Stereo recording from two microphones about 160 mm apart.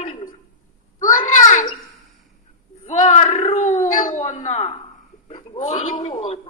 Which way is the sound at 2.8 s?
45° left (ahead or behind).